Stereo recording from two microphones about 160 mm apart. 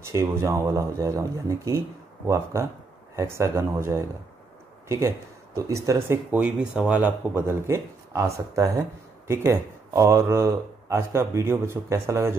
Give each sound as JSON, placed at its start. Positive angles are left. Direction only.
{"t": 0.1, "sound": "speech", "side_deg": -15}